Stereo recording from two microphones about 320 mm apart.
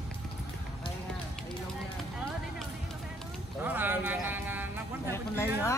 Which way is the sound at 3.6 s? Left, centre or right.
Centre.